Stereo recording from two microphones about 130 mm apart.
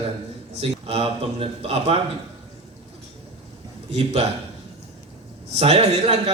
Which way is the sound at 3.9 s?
50° right (ahead or behind).